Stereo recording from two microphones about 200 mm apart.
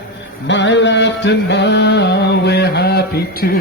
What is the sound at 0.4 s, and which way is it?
Music, 65° left (ahead or behind).